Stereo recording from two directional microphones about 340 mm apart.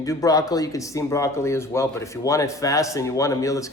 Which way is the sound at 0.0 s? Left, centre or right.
Centre.